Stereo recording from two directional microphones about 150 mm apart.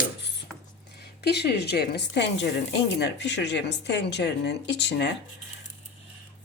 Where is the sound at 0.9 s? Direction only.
90° left.